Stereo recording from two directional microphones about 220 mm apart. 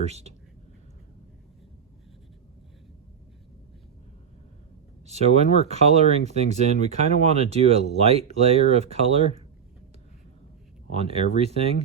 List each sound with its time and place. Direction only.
0.1 s speech: 30° right (ahead or behind)
5.0 s speech: 30° right (ahead or behind)
10.9 s speech: 25° right (ahead or behind)